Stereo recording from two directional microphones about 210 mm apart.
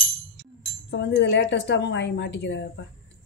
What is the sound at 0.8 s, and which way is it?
A woman's voice, 60° left (ahead or behind).